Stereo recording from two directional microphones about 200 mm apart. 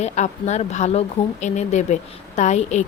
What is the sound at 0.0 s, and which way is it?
Speech, 35° left (ahead or behind).